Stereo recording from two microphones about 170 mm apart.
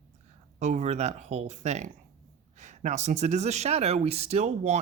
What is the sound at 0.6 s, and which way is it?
Speech, 45° right (ahead or behind).